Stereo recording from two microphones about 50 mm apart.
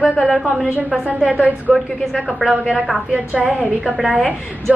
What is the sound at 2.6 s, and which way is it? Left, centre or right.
Speech, centre.